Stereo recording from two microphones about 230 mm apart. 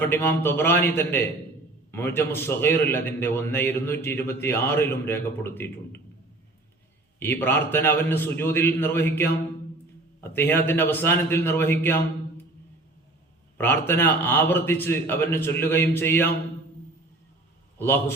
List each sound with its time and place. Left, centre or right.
0.0 s a man's voice: centre
7.2 s a man's voice: centre
13.6 s a man's voice: centre
17.7 s a man's voice: centre